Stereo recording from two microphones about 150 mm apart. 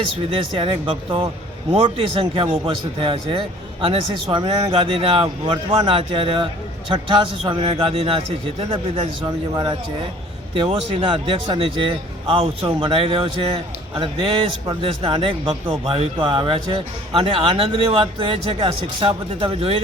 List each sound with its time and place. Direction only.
0.3 s a man's voice: 35° right (ahead or behind)
9.2 s a man's voice: 30° right (ahead or behind)